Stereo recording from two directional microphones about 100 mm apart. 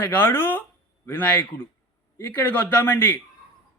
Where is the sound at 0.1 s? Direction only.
20° left (ahead or behind).